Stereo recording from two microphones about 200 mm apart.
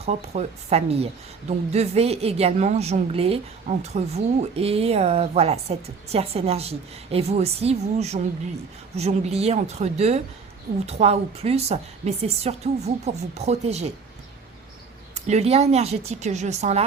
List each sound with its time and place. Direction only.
0.0 s a woman's voice: 30° right (ahead or behind)
15.1 s a woman's voice: 35° right (ahead or behind)